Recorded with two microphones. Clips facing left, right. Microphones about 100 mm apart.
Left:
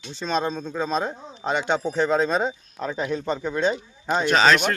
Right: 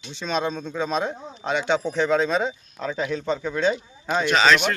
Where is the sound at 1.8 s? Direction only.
5° left (ahead or behind).